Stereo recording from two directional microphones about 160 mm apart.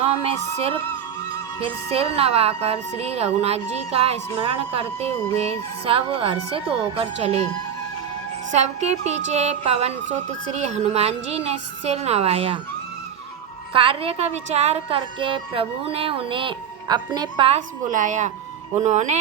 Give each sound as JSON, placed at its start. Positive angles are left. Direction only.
{"t": 0.1, "sound": "a woman's voice", "side_deg": -35}
{"t": 8.5, "sound": "music", "side_deg": -45}
{"t": 10.5, "sound": "a woman's voice", "side_deg": -45}
{"t": 13.7, "sound": "a woman's voice", "side_deg": -35}
{"t": 17.9, "sound": "music", "side_deg": -50}